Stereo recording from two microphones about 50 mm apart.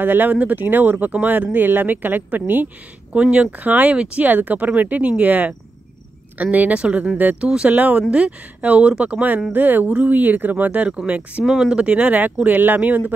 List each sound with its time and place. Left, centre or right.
0.0 s speech: right
3.1 s speech: right
3.6 s speech: right
7.4 s speech: centre
7.7 s speech: right
11.4 s speech: centre
11.7 s speech: right